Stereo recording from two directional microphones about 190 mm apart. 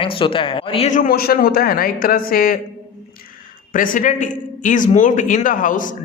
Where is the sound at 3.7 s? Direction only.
45° left (ahead or behind).